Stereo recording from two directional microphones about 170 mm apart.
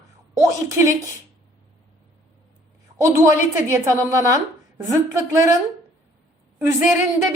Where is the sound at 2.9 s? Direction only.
20° right (ahead or behind).